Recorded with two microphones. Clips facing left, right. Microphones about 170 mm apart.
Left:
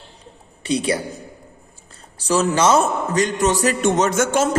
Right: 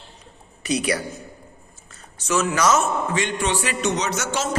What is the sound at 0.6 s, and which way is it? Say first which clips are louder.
Speech: left 2 dB; 30° left (ahead or behind).